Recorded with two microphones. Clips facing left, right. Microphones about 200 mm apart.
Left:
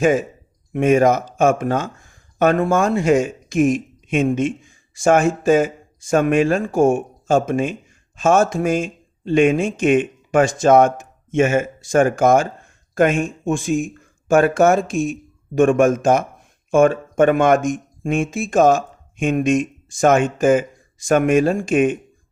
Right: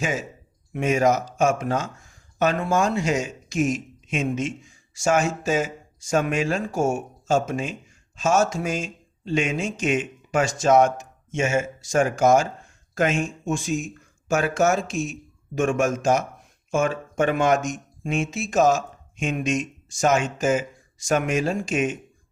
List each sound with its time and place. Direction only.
0.0 s speech: 55° left (ahead or behind)